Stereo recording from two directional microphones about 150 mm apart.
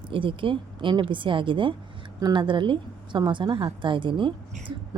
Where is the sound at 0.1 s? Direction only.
35° right (ahead or behind).